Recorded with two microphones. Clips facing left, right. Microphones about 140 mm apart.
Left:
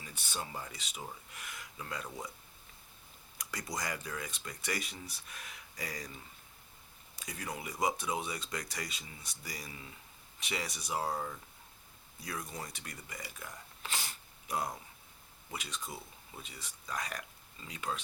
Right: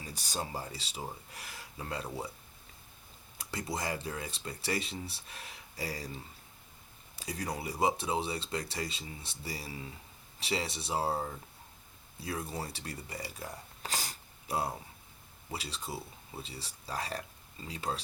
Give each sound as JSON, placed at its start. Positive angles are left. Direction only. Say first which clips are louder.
{"t": 0.0, "sound": "speech", "louder": "right 4 dB", "side_deg": -40}
{"t": 3.3, "sound": "speech", "louder": "right 3 dB", "side_deg": -25}
{"t": 7.2, "sound": "speech", "louder": "right 5 dB", "side_deg": -35}